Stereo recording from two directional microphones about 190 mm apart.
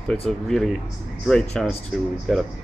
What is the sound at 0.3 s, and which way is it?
Speech, centre (ahead or behind).